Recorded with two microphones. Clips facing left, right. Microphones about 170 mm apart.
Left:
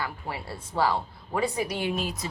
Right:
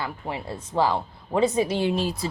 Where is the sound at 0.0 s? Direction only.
20° right (ahead or behind).